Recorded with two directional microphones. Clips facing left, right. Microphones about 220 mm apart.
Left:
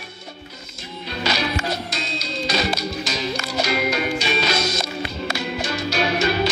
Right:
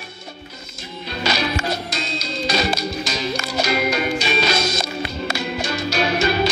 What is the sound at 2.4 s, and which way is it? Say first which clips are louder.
Music: right 2 dB; 45° right (ahead or behind).